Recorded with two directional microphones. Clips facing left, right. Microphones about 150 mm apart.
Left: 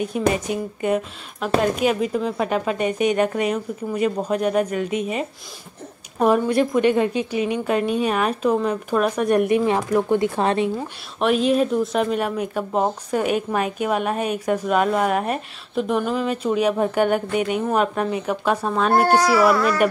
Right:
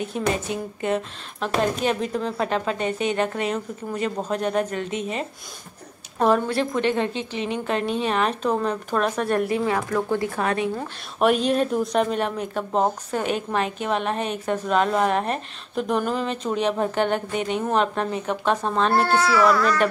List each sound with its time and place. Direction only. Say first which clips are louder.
0.7 s speech: left 2 dB; 10° left (ahead or behind)
11.1 s speech: left 1 dB; centre (ahead or behind)
19.0 s speech: left 3 dB; 40° left (ahead or behind)